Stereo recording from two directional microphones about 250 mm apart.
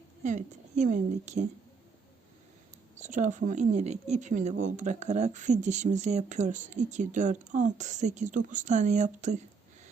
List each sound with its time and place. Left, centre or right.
0.2 s speech: right
2.9 s speech: right